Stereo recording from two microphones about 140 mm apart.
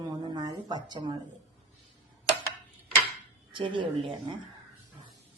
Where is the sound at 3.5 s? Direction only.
35° right (ahead or behind).